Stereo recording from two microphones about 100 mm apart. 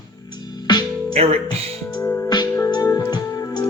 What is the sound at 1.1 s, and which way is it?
Speech, 90° right.